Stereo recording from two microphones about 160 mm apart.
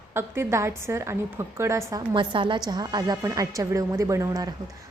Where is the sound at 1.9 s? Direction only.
30° right (ahead or behind).